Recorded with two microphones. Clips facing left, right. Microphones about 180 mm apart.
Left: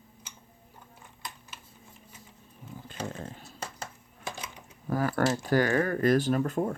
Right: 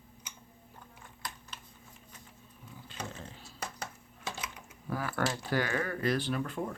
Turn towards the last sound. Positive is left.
turn(degrees=45)  # may be behind; listen again after turning